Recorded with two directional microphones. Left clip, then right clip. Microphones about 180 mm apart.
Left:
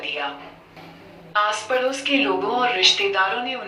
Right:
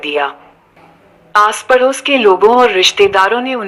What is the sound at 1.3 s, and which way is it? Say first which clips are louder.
Speech: right 11 dB; 45° right (ahead or behind).